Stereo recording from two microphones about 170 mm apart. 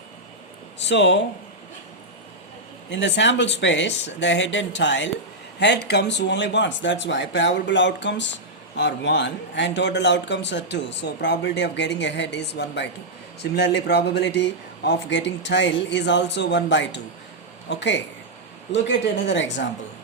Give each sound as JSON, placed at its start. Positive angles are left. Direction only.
{"t": 0.9, "sound": "speech", "side_deg": 90}
{"t": 2.9, "sound": "speech", "side_deg": 90}
{"t": 5.5, "sound": "speech", "side_deg": 80}